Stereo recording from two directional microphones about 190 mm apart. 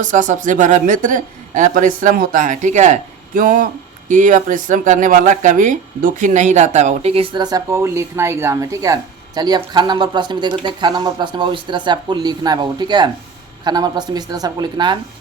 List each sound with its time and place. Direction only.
0.0 s speech: 40° right (ahead or behind); by 14.9 s 25° right (ahead or behind)